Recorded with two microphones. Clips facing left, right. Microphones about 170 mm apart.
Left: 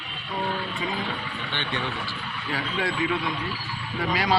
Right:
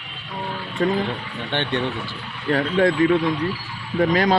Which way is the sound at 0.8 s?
55° right (ahead or behind).